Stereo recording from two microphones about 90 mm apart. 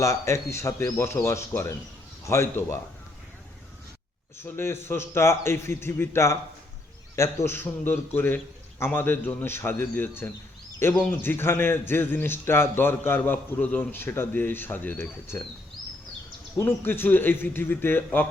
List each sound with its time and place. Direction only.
0.0 s a man's voice: 35° left (ahead or behind)
4.4 s a man's voice: 25° left (ahead or behind)
16.6 s a man's voice: 25° left (ahead or behind)